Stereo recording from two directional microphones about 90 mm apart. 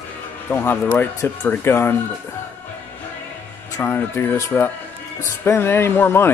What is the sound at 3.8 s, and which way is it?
Speech, 25° left (ahead or behind).